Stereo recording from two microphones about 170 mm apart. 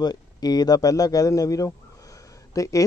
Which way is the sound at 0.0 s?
25° left (ahead or behind).